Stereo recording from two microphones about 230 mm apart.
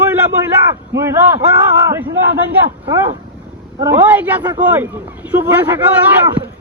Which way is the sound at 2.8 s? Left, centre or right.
Right.